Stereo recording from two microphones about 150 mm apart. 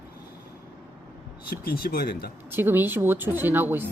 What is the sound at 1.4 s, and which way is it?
Speech, 85° left.